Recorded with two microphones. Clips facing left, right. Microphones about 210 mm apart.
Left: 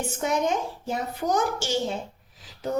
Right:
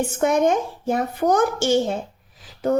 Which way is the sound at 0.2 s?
55° right (ahead or behind).